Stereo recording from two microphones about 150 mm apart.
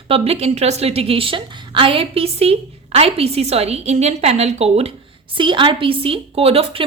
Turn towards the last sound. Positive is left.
turn(degrees=-40)  # may be behind; listen again after turning